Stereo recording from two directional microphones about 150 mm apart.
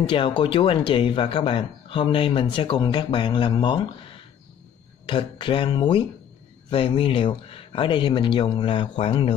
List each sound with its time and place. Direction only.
0.4 s speech: 35° left (ahead or behind)
5.0 s speech: 35° left (ahead or behind)